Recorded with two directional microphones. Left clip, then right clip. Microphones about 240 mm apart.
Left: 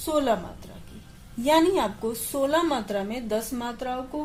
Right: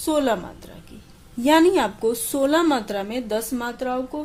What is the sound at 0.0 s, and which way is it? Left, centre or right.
Speech, right.